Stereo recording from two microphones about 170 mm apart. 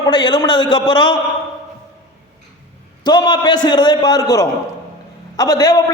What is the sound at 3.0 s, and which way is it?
A man's voice, 25° left (ahead or behind).